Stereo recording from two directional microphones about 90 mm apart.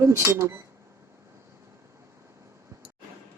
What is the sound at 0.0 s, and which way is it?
Speech, 30° right (ahead or behind).